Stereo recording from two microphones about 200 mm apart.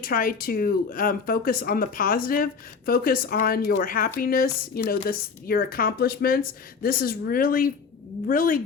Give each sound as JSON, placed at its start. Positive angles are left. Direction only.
{"t": 0.0, "sound": "speech", "side_deg": 45}